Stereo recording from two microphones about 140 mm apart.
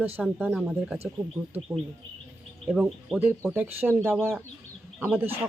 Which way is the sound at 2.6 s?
5° right (ahead or behind).